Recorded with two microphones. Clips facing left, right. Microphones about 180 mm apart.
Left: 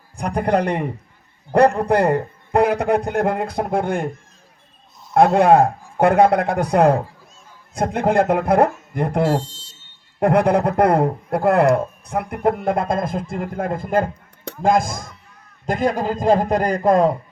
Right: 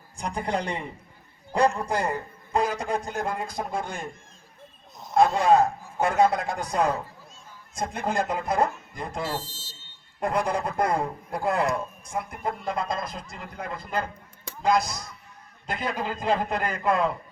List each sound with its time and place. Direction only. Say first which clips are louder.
0.2 s a man's voice: left 9 dB; 60° left (ahead or behind)
5.1 s a man's voice: left 6 dB; 60° left (ahead or behind)
9.4 s a sound: left 6 dB; 5° right (ahead or behind)
10.2 s a man's voice: left 10 dB; 60° left (ahead or behind); by 17.2 s 40° left (ahead or behind)